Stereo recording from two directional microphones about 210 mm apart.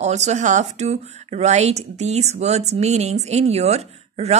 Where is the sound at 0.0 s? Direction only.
35° right (ahead or behind).